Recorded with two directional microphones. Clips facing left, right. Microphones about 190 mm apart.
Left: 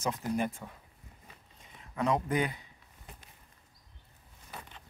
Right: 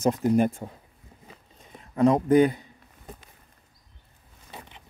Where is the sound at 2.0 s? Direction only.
40° right (ahead or behind).